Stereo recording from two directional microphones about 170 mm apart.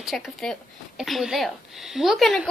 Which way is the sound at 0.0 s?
Centre (ahead or behind).